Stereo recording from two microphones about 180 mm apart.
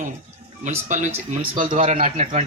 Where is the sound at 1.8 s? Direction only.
40° right (ahead or behind).